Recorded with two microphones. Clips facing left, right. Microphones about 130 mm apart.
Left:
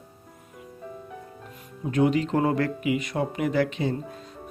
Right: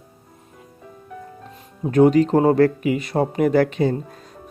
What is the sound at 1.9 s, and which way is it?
Speech, 40° right (ahead or behind).